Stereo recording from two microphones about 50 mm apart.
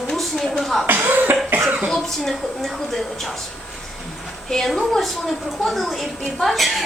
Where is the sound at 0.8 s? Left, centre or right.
Right.